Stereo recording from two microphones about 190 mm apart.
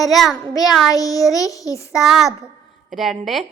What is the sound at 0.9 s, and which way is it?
Speech, 20° left (ahead or behind).